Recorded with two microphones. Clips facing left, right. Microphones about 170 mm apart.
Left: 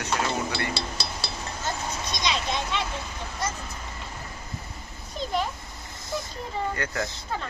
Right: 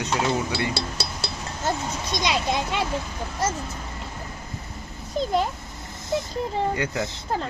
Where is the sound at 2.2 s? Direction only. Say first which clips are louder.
Right 4 dB; 45° right (ahead or behind).